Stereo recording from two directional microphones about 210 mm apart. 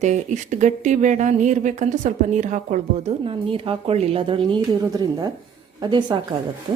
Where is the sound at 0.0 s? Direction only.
35° right (ahead or behind).